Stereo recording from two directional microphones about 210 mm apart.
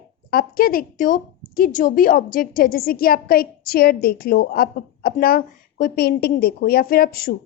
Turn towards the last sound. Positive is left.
turn(degrees=45)  # may be behind; listen again after turning